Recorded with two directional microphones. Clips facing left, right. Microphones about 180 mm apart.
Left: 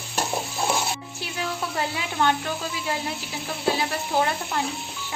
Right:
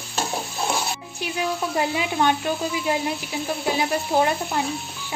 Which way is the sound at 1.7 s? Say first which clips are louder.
Right 4 dB; 15° right (ahead or behind).